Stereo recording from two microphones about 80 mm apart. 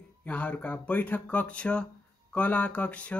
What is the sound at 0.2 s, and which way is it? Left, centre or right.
Speech, centre.